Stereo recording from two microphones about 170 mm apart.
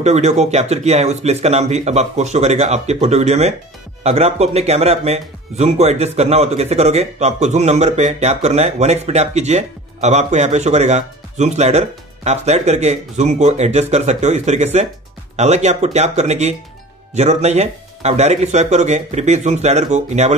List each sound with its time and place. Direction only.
0.0 s speech: 40° right (ahead or behind)